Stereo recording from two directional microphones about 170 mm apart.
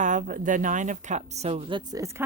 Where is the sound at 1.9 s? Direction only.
20° right (ahead or behind).